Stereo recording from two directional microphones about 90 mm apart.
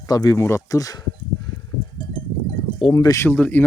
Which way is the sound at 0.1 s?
45° left (ahead or behind).